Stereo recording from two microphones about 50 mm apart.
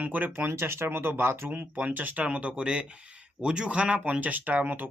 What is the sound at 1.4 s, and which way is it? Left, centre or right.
Speech, right.